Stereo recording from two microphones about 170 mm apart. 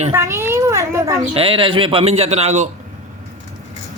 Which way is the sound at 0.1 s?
15° right (ahead or behind).